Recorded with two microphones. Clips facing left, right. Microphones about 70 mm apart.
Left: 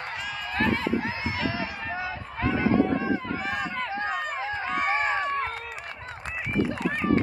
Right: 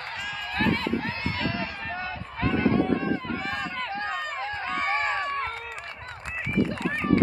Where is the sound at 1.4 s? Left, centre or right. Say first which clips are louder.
Left 1 dB; centre.